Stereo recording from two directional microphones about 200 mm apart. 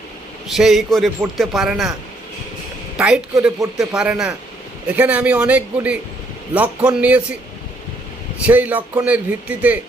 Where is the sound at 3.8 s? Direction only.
5° right (ahead or behind).